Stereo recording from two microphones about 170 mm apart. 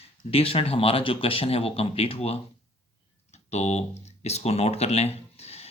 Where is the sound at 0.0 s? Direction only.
35° left (ahead or behind).